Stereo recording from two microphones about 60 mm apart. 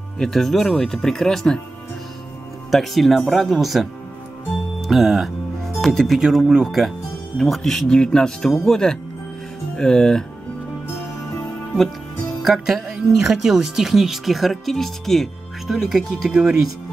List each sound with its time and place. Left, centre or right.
0.2 s speech: centre
2.7 s speech: centre
4.8 s speech: centre
7.3 s speech: centre
12.4 s speech: centre
15.6 s speech: centre
16.3 s speech: centre